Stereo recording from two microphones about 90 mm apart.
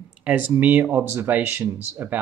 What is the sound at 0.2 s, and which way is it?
Speech, 15° right (ahead or behind).